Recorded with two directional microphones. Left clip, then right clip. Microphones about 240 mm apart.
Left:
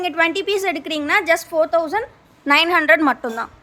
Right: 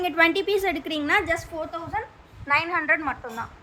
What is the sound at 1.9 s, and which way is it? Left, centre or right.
Speech, left.